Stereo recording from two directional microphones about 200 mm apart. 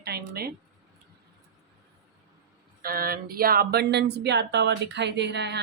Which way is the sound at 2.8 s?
50° right (ahead or behind).